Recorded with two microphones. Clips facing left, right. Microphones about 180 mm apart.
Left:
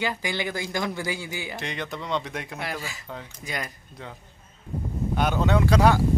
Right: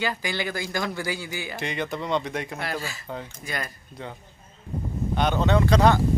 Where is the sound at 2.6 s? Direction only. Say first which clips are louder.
Right 2 dB; 15° left (ahead or behind).